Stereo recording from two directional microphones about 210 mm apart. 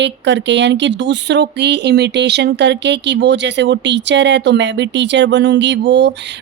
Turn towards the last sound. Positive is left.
turn(degrees=-55)  # may be behind; listen again after turning